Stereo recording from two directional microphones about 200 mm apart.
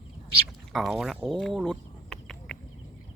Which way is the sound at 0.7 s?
Centre (ahead or behind).